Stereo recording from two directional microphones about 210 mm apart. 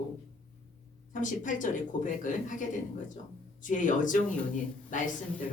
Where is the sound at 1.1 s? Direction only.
40° left (ahead or behind).